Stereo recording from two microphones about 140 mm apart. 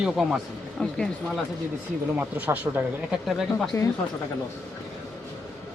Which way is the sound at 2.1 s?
15° right (ahead or behind).